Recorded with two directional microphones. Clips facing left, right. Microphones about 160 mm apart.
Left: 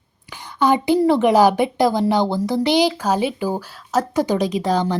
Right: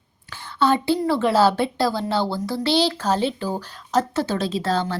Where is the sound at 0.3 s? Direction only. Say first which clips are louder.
Left 2 dB; 15° left (ahead or behind).